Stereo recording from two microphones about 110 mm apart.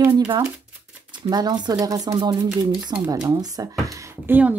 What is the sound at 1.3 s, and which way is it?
Speech, 40° right (ahead or behind).